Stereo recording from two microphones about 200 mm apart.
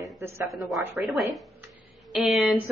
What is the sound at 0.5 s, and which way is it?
A woman's voice, centre (ahead or behind).